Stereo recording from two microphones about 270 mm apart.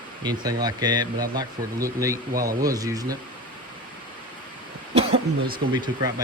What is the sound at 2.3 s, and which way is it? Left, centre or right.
Speech, right.